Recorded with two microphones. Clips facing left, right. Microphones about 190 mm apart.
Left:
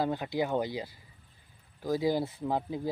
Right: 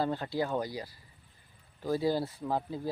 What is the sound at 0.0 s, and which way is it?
Speech, 15° left (ahead or behind).